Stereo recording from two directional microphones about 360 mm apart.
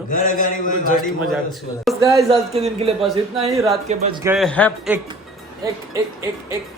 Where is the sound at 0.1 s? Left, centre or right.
Left.